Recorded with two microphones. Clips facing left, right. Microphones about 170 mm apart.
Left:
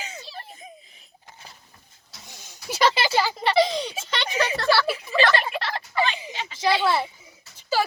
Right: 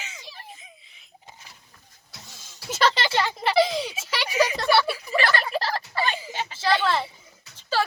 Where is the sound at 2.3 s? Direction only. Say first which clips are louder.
Left 1 dB; 15° left (ahead or behind); by 4.9 s 20° right (ahead or behind).